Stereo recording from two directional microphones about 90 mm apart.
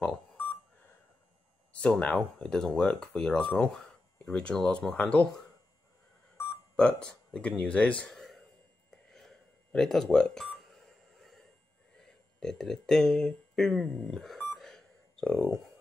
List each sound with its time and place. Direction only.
1.7 s speech: 15° left (ahead or behind)
6.8 s speech: 10° left (ahead or behind)
9.1 s a sound: 5° left (ahead or behind)
15.3 s speech: 30° right (ahead or behind)